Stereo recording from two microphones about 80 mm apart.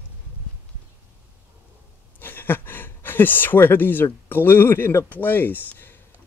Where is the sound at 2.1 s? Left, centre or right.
Left.